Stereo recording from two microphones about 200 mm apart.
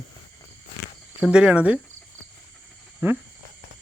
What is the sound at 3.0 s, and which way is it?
Speech, 10° right (ahead or behind).